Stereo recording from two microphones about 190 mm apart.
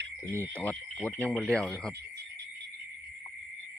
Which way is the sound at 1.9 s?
60° right (ahead or behind).